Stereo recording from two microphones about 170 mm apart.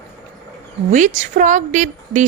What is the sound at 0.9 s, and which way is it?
A woman's voice, 50° right (ahead or behind).